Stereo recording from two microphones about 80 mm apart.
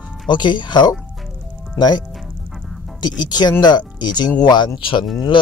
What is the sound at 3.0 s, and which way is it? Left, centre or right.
Speech, left.